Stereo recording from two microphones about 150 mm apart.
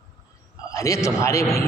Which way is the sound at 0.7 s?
20° left (ahead or behind).